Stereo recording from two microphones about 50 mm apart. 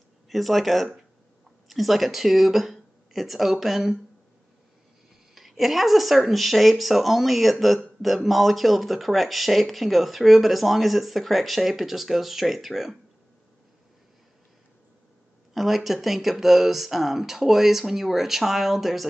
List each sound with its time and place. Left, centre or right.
0.3 s speech: centre
5.3 s speech: centre
15.5 s speech: centre